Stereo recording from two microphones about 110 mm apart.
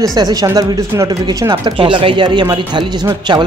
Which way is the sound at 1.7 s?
50° right (ahead or behind).